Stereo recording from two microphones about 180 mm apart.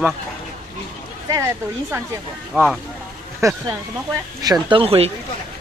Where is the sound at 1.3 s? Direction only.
15° right (ahead or behind).